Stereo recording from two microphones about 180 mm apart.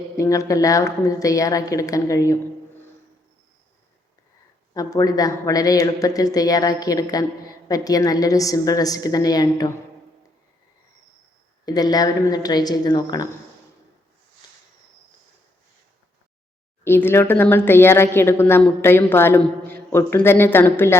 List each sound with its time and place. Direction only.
0.2 s speech: 20° left (ahead or behind)
4.7 s speech: 20° left (ahead or behind)
11.6 s speech: 20° left (ahead or behind)
16.8 s speech: 10° left (ahead or behind)